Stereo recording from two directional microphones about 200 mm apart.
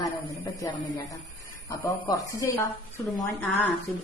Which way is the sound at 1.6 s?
15° left (ahead or behind).